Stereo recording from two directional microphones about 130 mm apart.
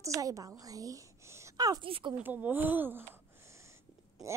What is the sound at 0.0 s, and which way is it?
A woman's voice, 25° right (ahead or behind).